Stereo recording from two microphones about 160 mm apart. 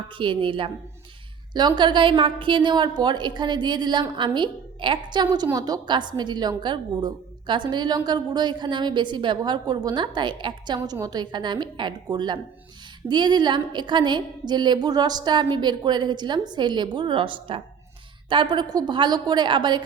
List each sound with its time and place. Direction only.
0.2 s a woman's voice: 30° right (ahead or behind)